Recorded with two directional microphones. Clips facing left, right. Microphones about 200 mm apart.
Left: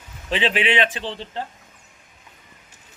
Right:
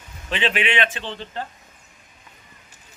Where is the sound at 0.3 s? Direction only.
30° left (ahead or behind).